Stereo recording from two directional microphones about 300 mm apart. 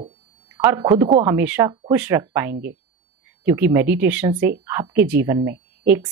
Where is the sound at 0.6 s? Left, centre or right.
Centre.